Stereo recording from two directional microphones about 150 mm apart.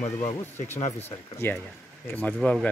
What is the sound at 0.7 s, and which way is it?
Speech, 50° left (ahead or behind).